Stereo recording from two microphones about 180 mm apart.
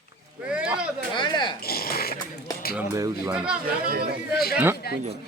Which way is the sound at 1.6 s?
55° left (ahead or behind).